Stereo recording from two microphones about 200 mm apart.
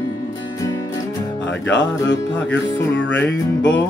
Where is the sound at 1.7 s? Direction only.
65° left (ahead or behind).